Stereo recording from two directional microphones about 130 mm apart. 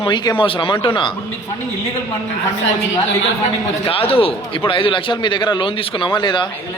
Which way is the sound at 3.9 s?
45° left (ahead or behind).